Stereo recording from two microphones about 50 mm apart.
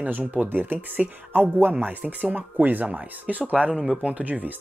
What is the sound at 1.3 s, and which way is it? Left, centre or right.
Speech, right.